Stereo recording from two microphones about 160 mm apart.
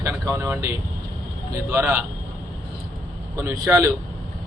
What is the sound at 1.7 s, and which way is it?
Speech, 15° right (ahead or behind).